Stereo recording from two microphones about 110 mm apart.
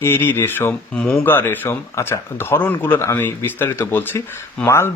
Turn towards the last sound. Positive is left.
turn(degrees=25)  # may be behind; listen again after turning